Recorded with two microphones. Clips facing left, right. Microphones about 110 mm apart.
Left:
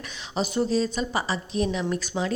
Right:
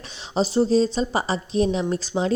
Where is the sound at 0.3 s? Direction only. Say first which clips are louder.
Right 5 dB; 30° right (ahead or behind).